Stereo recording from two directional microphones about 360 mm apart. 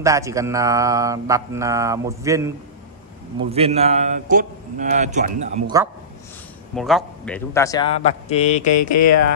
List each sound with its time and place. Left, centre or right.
0.0 s mantra: centre
3.3 s a man's voice: centre
6.7 s a man's voice: centre
8.8 s speech: left